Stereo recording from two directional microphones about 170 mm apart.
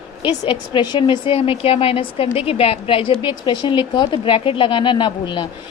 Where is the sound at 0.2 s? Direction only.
30° left (ahead or behind).